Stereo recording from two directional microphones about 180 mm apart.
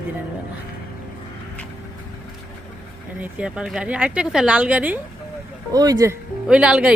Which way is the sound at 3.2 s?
5° right (ahead or behind).